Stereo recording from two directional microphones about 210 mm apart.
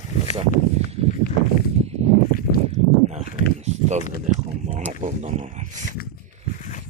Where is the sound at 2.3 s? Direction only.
45° left (ahead or behind).